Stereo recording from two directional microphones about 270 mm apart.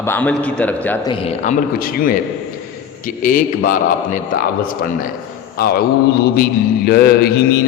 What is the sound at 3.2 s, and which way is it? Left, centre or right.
Speech, left.